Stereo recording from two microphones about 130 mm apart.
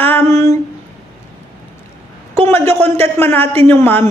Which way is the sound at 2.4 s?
20° left (ahead or behind).